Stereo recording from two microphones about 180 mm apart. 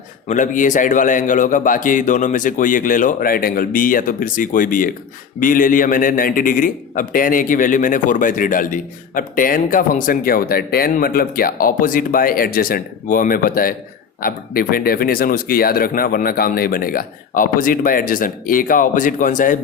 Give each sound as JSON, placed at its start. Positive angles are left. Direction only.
{"t": 0.3, "sound": "a man's voice", "side_deg": 45}